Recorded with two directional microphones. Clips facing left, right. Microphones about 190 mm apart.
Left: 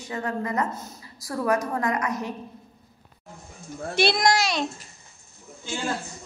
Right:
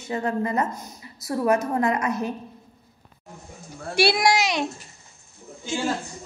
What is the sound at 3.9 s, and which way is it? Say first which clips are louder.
A child's voice: right 1 dB; 10° right (ahead or behind).